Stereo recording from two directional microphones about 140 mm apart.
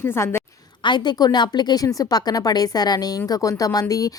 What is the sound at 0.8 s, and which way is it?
A woman's voice, 30° left (ahead or behind).